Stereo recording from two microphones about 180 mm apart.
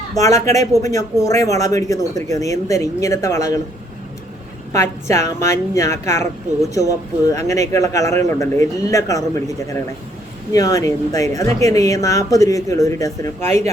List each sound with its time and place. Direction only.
0.2 s a woman's voice: 20° left (ahead or behind)
4.7 s a woman's voice: 15° left (ahead or behind)